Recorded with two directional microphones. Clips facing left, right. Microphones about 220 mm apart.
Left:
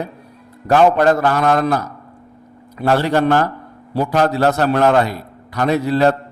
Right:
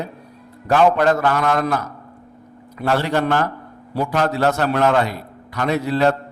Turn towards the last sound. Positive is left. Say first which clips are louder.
# left 3 dB
turn(degrees=40)  # may be behind; listen again after turning